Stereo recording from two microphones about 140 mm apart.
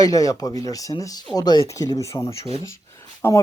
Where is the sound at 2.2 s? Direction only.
45° left (ahead or behind).